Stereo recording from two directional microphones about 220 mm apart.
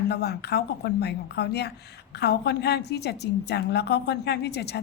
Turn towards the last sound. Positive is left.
turn(degrees=50)  # may be behind; listen again after turning